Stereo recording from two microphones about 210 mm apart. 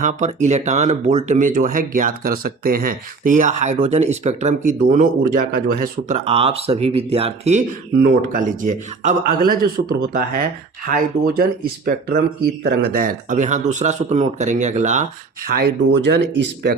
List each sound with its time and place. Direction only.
0.0 s speech: 35° right (ahead or behind)
7.9 s speech: 45° right (ahead or behind)
15.4 s speech: 50° right (ahead or behind)